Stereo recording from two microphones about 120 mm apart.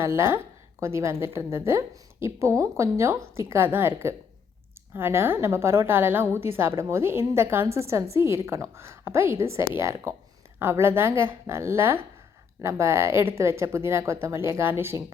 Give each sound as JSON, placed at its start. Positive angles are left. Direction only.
{"t": 0.0, "sound": "a woman's voice", "side_deg": -20}